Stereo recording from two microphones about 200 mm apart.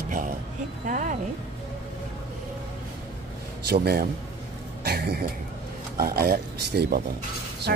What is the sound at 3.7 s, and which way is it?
Speech, 50° right (ahead or behind).